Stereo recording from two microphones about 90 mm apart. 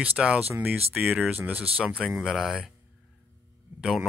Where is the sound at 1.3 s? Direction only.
20° right (ahead or behind).